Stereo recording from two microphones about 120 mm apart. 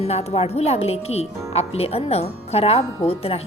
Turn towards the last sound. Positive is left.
turn(degrees=55)  # may be behind; listen again after turning